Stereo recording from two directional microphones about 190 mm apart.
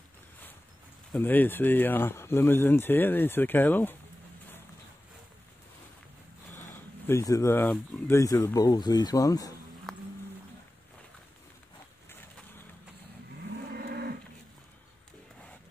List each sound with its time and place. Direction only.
1.1 s speech: 10° left (ahead or behind)
7.1 s speech: 15° left (ahead or behind)
9.9 s a sound: centre (ahead or behind)
13.7 s livestock: 55° right (ahead or behind)